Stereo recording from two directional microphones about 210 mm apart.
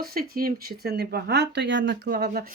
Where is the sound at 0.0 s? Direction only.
45° right (ahead or behind).